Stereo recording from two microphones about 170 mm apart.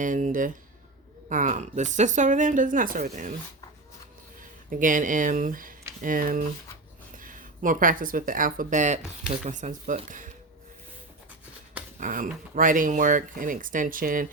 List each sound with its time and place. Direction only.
0.0 s a woman's voice: 50° right (ahead or behind)
4.7 s a woman's voice: 50° right (ahead or behind)
11.9 s a woman's voice: 50° right (ahead or behind)